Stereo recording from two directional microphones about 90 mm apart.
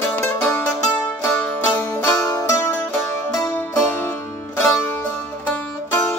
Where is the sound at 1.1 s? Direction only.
25° left (ahead or behind).